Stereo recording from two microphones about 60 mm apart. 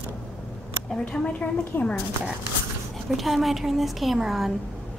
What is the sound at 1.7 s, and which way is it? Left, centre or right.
Speech, left.